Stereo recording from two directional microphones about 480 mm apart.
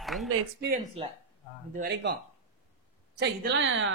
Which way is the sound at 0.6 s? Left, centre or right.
Centre.